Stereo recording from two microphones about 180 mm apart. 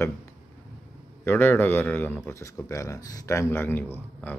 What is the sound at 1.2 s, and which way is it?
Speech, 10° left (ahead or behind).